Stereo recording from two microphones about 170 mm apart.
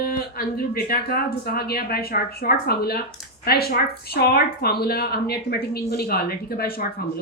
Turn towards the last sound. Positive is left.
turn(degrees=60)  # may be behind; listen again after turning